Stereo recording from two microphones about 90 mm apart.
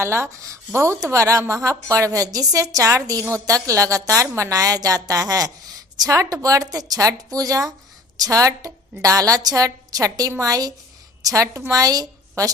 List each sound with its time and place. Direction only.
0.0 s a woman's voice: 30° right (ahead or behind)